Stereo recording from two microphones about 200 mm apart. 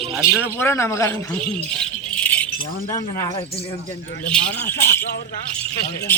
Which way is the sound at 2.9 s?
15° left (ahead or behind).